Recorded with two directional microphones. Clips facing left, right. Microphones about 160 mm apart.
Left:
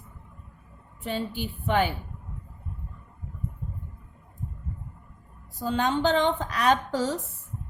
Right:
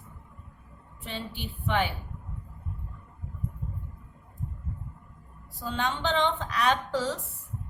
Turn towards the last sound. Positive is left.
turn(degrees=40)  # may be behind; listen again after turning